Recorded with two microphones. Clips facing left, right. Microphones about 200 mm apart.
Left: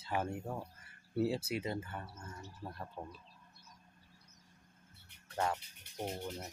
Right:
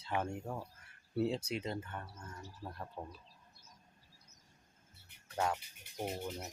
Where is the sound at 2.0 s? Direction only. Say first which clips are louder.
Left 1 dB; 25° left (ahead or behind).